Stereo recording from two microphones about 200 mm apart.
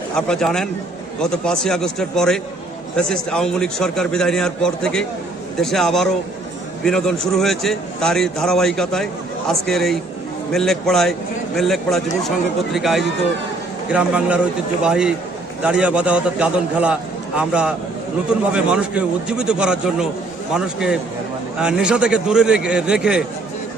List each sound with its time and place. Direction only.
0.2 s a man's voice: 5° left (ahead or behind)